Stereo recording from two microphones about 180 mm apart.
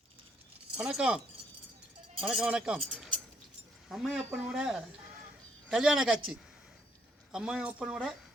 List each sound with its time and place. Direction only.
0.8 s speech: 5° right (ahead or behind)
2.2 s speech: 5° right (ahead or behind)
7.3 s speech: 5° right (ahead or behind)